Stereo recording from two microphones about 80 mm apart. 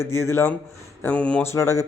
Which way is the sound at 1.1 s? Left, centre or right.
Centre.